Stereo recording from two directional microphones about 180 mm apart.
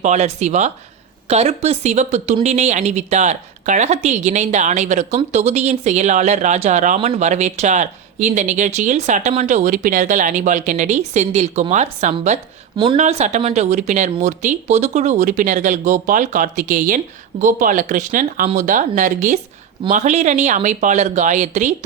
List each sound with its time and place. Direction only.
0.0 s speech: 40° right (ahead or behind)
12.7 s a woman's voice: 25° right (ahead or behind)
13.0 s speech: 40° right (ahead or behind)